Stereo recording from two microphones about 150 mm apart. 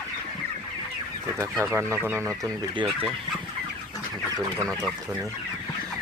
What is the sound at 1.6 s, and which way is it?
Speech, 15° right (ahead or behind).